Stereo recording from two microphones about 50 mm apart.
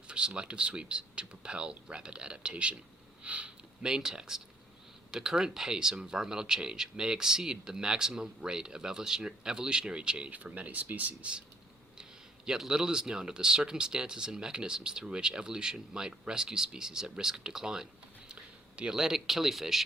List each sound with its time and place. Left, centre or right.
0.1 s speech: centre
3.2 s sniff: right
3.9 s speech: centre
12.5 s speech: centre